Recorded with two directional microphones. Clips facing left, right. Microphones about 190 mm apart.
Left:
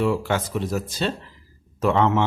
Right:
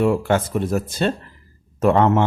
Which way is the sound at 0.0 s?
50° right (ahead or behind).